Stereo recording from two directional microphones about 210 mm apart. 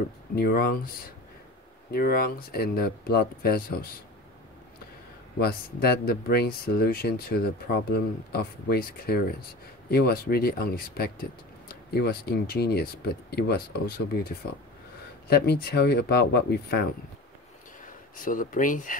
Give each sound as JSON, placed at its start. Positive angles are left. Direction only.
{"t": 0.4, "sound": "speech", "side_deg": 45}
{"t": 5.4, "sound": "speech", "side_deg": 50}
{"t": 18.1, "sound": "speech", "side_deg": 40}